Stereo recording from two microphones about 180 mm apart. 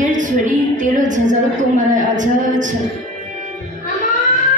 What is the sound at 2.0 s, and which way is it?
Speech, 45° right (ahead or behind).